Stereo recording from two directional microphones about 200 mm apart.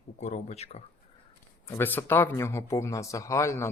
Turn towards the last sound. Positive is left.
turn(degrees=15)  # may be behind; listen again after turning